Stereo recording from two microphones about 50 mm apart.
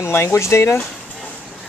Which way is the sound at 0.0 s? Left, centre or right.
Left.